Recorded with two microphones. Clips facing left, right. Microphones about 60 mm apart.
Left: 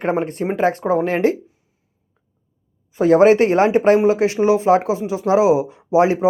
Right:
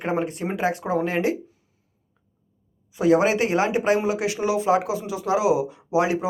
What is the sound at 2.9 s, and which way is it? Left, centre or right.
Speech, left.